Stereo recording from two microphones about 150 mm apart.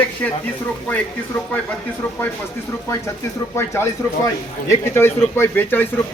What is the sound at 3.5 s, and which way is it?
Speech, 15° left (ahead or behind).